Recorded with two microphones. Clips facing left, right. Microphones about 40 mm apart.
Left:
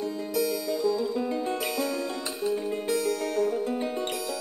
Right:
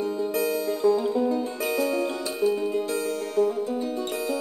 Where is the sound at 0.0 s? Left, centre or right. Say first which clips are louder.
Right 3 dB; right.